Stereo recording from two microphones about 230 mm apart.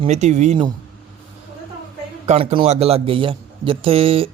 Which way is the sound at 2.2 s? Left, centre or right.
Right.